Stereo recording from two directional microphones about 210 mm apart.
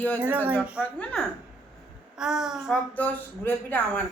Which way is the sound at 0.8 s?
5° left (ahead or behind).